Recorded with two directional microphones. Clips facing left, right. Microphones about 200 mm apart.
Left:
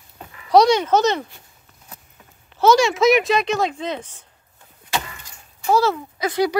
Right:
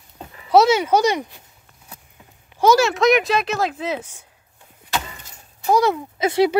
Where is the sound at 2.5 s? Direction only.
10° right (ahead or behind).